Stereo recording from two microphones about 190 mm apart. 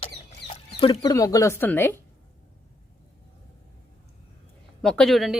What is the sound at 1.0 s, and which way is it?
Speech, 15° left (ahead or behind).